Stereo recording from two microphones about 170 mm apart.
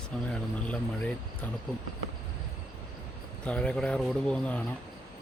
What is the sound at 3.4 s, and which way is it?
Speech, 5° left (ahead or behind).